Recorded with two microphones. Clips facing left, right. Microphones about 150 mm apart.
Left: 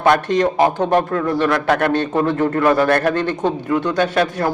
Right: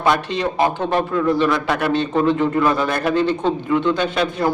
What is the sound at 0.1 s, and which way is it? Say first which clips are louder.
A man's voice: left 5 dB; 50° left (ahead or behind).